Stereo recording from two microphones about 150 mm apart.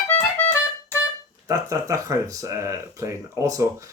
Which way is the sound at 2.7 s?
20° right (ahead or behind).